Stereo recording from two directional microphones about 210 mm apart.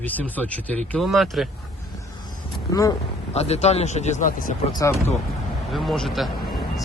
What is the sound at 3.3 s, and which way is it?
Speech, 30° left (ahead or behind).